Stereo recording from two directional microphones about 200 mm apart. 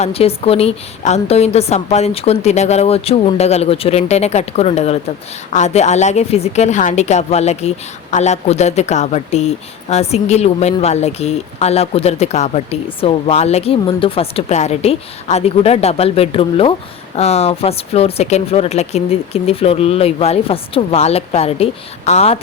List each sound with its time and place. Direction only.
0.0 s a woman's voice: 30° left (ahead or behind)